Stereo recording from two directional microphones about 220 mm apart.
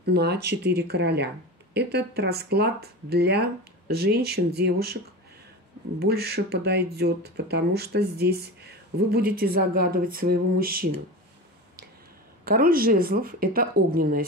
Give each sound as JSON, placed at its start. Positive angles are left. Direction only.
{"t": 0.0, "sound": "speech", "side_deg": -45}
{"t": 5.9, "sound": "speech", "side_deg": -45}
{"t": 12.4, "sound": "speech", "side_deg": -40}